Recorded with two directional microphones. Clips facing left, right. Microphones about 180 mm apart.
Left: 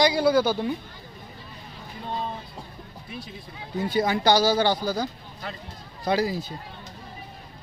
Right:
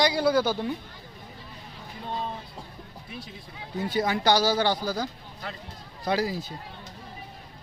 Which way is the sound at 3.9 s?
25° left (ahead or behind).